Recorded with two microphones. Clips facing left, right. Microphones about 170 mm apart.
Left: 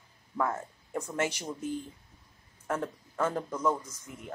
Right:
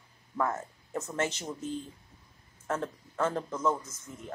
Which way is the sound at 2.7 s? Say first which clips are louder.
Even; 10° left (ahead or behind).